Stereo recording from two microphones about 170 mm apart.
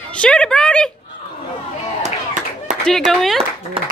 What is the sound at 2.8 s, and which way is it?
Speech, centre (ahead or behind).